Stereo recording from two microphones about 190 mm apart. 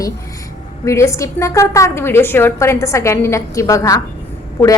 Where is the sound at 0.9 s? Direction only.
15° left (ahead or behind).